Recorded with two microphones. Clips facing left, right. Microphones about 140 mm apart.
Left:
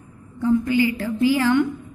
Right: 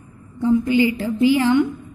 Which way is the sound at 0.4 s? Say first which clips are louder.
Right 2 dB; 20° right (ahead or behind).